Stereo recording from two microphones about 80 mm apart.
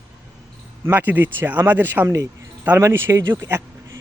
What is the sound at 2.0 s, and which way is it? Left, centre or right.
Speech, right.